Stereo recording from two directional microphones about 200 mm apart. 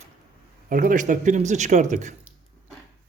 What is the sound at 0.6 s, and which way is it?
Speech, 40° right (ahead or behind).